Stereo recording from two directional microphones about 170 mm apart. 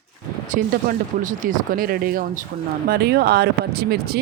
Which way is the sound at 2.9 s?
70° right (ahead or behind).